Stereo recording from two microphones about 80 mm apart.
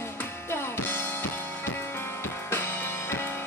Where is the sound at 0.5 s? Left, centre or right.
Left.